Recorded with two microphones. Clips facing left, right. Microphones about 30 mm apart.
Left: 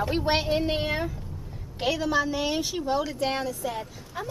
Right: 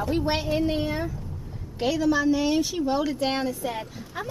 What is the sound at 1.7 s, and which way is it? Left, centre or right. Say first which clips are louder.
A woman's voice: right 2 dB; centre.